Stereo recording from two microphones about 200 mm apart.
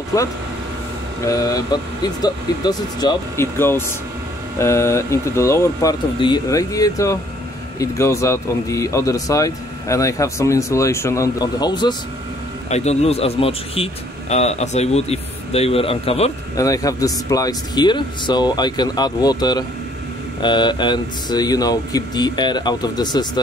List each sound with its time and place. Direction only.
0.1 s speech: 15° left (ahead or behind)
12.6 s a man's voice: 35° left (ahead or behind)
16.5 s speech: 15° left (ahead or behind)